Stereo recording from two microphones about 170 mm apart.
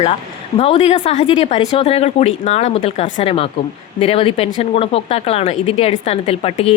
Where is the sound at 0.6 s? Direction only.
40° left (ahead or behind).